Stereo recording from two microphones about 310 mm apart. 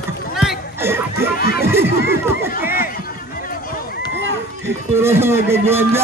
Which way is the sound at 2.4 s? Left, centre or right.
Left.